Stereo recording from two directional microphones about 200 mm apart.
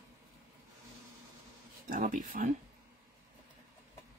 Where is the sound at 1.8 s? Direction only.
45° right (ahead or behind).